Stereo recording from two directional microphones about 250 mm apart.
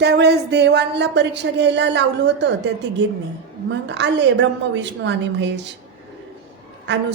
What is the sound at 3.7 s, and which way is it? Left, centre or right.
Speech, right.